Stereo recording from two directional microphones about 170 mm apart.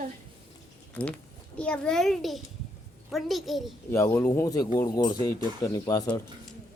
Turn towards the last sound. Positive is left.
turn(degrees=20)  # may be behind; listen again after turning